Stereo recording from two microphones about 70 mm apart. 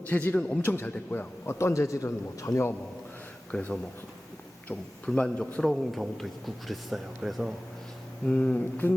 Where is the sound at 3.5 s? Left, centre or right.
Centre.